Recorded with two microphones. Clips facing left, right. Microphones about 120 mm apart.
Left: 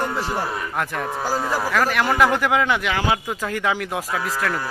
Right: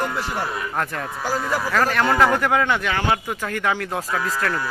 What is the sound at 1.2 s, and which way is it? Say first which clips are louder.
Speech: right 1 dB; 35° left (ahead or behind).